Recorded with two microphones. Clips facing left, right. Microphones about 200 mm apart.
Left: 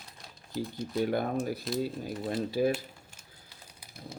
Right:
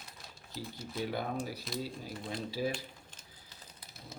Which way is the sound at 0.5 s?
Centre (ahead or behind).